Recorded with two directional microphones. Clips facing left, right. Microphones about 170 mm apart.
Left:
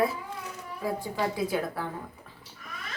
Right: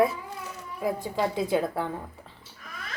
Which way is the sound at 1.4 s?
25° right (ahead or behind).